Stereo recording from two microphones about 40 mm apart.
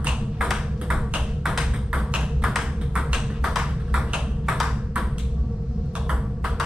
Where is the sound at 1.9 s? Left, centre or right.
Right.